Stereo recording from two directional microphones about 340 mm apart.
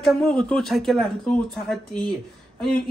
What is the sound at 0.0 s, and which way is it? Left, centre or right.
Speech, centre.